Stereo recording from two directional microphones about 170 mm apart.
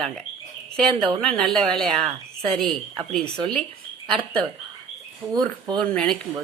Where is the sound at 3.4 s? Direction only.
25° right (ahead or behind).